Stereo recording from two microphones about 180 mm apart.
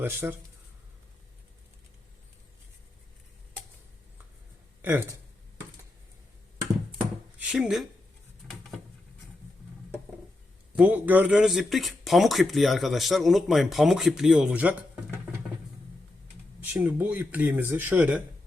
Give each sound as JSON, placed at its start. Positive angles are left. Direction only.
{"t": 0.0, "sound": "speech", "side_deg": -10}
{"t": 4.8, "sound": "speech", "side_deg": -10}
{"t": 7.0, "sound": "a sound", "side_deg": -5}
{"t": 10.8, "sound": "speech", "side_deg": -10}
{"t": 16.6, "sound": "speech", "side_deg": -10}